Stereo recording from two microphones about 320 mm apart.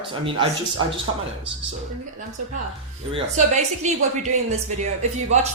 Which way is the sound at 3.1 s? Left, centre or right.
Right.